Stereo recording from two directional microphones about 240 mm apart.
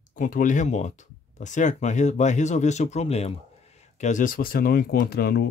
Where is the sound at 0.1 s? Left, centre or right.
Left.